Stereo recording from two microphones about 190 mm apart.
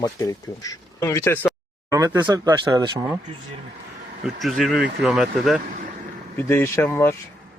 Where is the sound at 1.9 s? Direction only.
15° right (ahead or behind).